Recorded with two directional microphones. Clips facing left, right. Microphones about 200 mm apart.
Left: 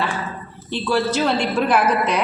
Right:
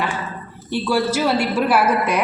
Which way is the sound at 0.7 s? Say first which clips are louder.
Right 1 dB; 10° right (ahead or behind).